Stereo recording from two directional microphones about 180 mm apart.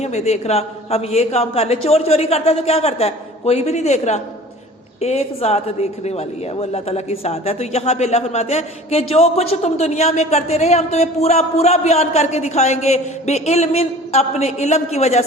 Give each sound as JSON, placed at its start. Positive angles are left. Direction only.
{"t": 0.0, "sound": "a woman's voice", "side_deg": 40}